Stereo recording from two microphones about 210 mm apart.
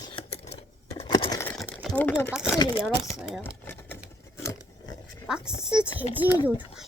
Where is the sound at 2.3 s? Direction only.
Centre (ahead or behind).